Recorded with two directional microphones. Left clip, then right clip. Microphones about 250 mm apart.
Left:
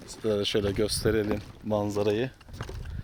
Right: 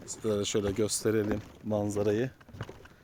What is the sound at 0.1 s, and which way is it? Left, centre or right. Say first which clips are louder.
Speech: left 3 dB; centre.